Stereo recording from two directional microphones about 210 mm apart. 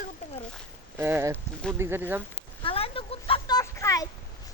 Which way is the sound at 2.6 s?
25° left (ahead or behind).